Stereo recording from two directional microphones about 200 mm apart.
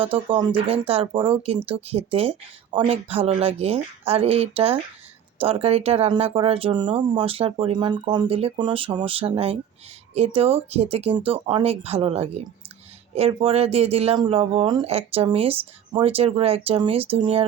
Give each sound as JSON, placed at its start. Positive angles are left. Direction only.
{"t": 0.0, "sound": "speech", "side_deg": -25}